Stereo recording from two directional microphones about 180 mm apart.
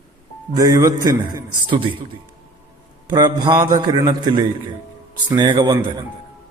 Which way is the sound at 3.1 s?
20° right (ahead or behind).